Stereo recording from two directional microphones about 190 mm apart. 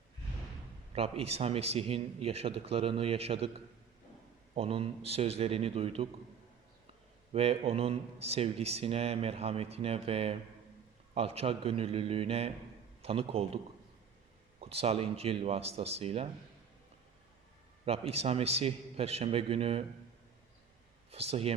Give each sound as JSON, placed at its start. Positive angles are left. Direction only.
{"t": 0.9, "sound": "speech", "side_deg": -30}
{"t": 4.5, "sound": "speech", "side_deg": -30}
{"t": 7.3, "sound": "a man's voice", "side_deg": -30}
{"t": 14.6, "sound": "speech", "side_deg": -30}
{"t": 17.8, "sound": "speech", "side_deg": -30}
{"t": 21.1, "sound": "speech", "side_deg": -30}